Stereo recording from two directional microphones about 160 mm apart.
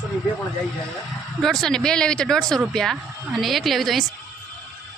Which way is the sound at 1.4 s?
Centre (ahead or behind).